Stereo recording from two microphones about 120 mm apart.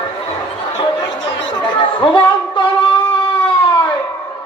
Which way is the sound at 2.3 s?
45° left (ahead or behind).